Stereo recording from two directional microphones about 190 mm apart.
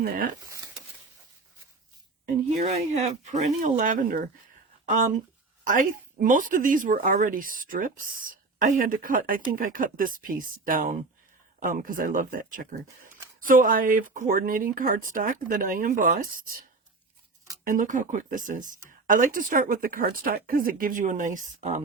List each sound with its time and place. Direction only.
0.0 s a woman's voice: 50° right (ahead or behind)
2.2 s a woman's voice: 35° right (ahead or behind)
17.7 s a woman's voice: 45° right (ahead or behind)